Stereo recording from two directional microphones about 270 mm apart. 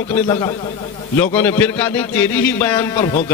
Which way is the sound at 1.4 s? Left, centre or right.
Centre.